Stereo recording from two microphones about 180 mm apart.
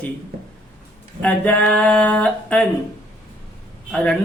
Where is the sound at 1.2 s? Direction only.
5° left (ahead or behind).